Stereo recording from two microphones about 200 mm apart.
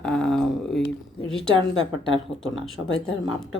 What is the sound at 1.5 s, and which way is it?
Speech, 25° right (ahead or behind).